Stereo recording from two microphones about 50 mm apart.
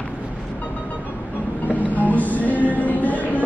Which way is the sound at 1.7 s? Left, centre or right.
Left.